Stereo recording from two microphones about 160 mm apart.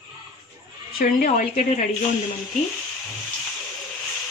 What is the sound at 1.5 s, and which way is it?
Speech, 45° left (ahead or behind).